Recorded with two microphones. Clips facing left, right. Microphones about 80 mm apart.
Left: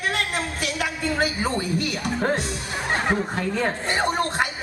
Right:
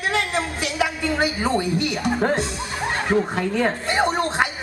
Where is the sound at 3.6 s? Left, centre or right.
Right.